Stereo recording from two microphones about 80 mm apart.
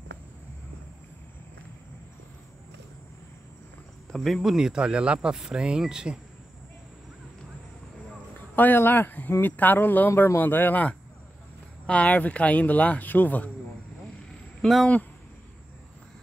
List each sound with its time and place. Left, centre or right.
4.1 s speech: centre
8.4 s speech: left